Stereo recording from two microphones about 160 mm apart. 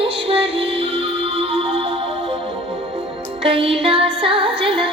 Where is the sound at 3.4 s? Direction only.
35° right (ahead or behind).